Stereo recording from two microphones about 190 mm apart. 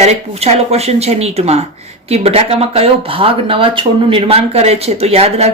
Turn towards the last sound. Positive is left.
turn(degrees=-35)  # may be behind; listen again after turning